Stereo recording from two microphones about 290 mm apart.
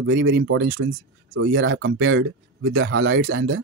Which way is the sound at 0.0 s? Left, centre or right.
Right.